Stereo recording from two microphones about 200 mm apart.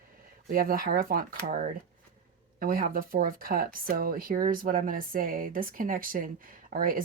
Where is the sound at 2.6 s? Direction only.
45° right (ahead or behind).